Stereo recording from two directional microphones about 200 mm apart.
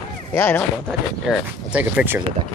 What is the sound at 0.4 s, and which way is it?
Speech, 10° left (ahead or behind).